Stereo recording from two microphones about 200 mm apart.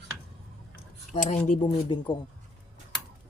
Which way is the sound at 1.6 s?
25° left (ahead or behind).